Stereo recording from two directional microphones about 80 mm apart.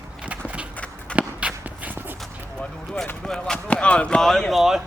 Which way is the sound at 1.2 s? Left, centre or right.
Centre.